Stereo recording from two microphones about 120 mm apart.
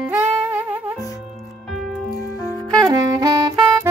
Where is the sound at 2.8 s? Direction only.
30° right (ahead or behind).